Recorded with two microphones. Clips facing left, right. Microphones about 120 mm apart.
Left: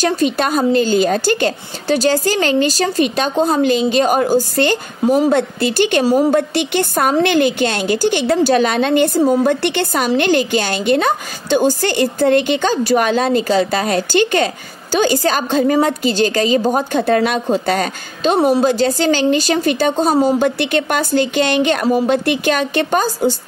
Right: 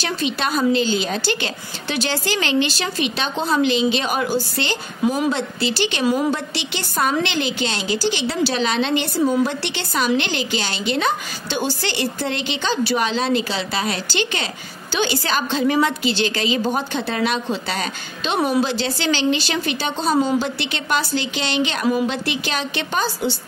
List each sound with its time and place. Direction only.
0.0 s a woman's voice: 45° left (ahead or behind)